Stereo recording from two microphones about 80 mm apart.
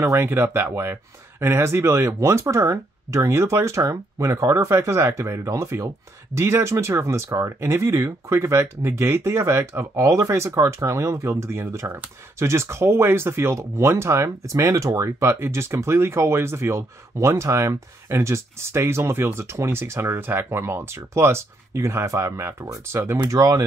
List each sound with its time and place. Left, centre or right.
0.0 s speech: right